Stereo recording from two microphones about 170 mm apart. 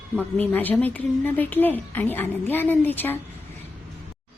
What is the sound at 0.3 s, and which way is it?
A woman's voice, 10° left (ahead or behind).